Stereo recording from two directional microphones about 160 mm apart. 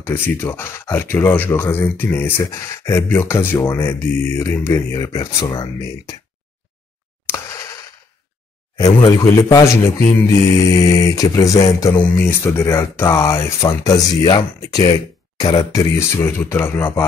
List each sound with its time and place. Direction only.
0.0 s speech: 15° left (ahead or behind)
7.2 s a sound: 15° left (ahead or behind)
8.7 s speech: 20° left (ahead or behind)